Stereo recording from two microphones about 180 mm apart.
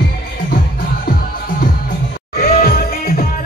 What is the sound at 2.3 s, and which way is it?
Music, 55° left (ahead or behind).